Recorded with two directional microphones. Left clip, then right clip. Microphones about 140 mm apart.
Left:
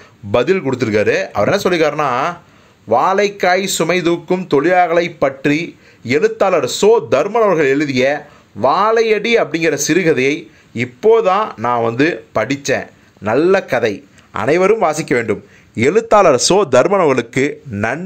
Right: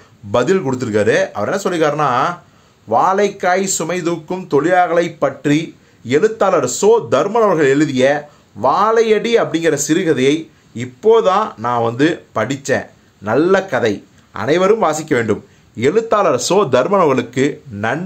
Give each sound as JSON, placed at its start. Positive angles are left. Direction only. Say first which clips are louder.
{"t": 0.3, "sound": "a man's voice", "louder": "left 1 dB", "side_deg": 15}